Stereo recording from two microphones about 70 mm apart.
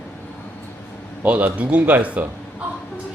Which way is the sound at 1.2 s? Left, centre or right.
Right.